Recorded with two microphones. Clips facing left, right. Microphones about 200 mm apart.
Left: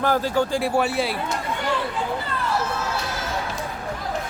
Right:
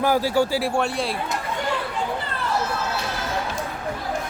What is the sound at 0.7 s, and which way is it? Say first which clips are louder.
Speech: left 2 dB; 5° left (ahead or behind).